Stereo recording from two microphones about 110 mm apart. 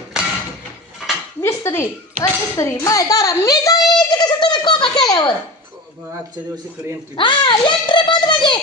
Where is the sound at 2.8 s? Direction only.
30° left (ahead or behind).